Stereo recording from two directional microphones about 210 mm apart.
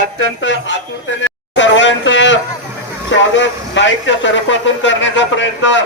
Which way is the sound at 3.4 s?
60° left (ahead or behind).